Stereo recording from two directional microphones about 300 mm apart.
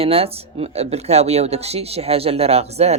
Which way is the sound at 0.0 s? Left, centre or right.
Centre.